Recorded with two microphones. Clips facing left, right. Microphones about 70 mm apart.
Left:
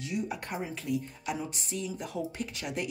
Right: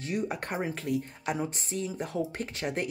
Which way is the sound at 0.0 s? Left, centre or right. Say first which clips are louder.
Right 2 dB; right.